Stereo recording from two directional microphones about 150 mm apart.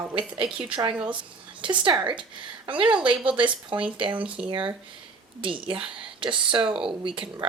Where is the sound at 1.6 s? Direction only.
30° right (ahead or behind).